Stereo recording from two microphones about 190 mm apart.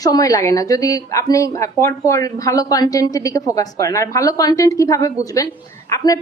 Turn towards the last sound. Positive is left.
turn(degrees=15)  # may be behind; listen again after turning